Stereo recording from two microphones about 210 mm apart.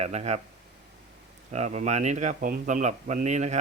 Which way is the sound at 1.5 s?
35° right (ahead or behind).